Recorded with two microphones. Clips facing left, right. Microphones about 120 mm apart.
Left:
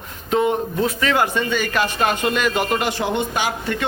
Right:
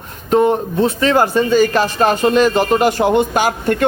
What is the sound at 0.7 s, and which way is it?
A man's voice, 30° right (ahead or behind).